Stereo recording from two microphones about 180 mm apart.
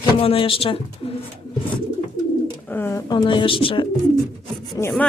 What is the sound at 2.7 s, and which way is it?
Speech, 15° left (ahead or behind).